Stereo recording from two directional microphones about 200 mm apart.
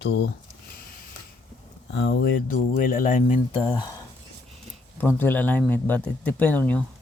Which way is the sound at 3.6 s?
20° left (ahead or behind).